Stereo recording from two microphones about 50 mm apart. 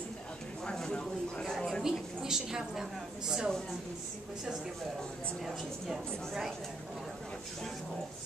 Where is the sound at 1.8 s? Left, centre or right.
Centre.